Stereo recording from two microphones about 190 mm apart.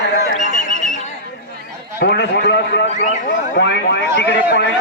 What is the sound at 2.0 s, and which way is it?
A man's voice, 60° left (ahead or behind).